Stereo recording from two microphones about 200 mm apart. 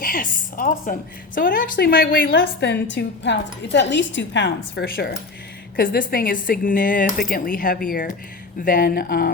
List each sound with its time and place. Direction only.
0.0 s a woman's voice: 45° left (ahead or behind)
5.7 s speech: 45° left (ahead or behind)